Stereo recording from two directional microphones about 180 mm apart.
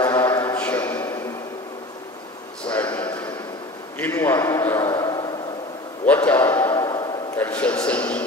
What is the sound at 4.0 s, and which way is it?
A man's voice, 10° left (ahead or behind).